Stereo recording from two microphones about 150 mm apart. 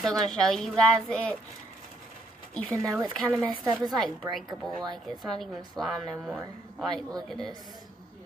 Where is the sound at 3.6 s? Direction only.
30° right (ahead or behind).